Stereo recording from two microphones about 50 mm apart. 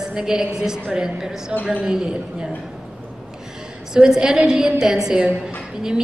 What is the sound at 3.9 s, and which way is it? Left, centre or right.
A woman's voice, centre.